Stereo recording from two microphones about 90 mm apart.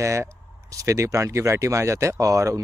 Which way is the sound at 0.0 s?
35° right (ahead or behind).